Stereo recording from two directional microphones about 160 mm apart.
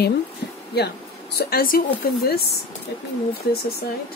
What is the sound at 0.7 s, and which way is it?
Speech, 90° left.